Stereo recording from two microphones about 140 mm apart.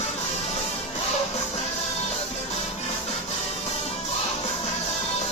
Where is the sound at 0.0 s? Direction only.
50° left (ahead or behind).